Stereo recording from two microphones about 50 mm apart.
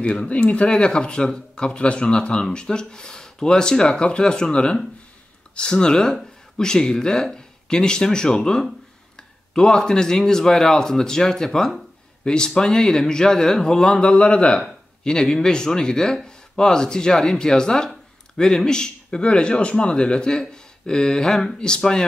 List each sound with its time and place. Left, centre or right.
0.0 s speech: left